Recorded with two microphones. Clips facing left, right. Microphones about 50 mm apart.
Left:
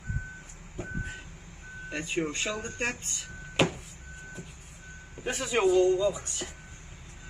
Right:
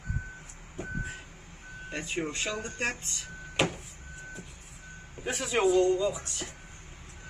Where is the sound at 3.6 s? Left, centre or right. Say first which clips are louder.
Left 2 dB; centre.